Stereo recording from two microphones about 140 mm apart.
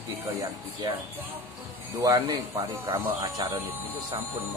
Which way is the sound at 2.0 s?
25° right (ahead or behind).